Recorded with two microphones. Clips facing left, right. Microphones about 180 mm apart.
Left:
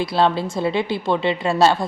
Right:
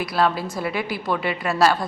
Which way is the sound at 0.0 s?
25° left (ahead or behind).